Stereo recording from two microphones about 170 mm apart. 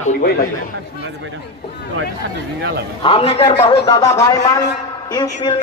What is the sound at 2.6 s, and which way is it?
Speech, 75° right (ahead or behind).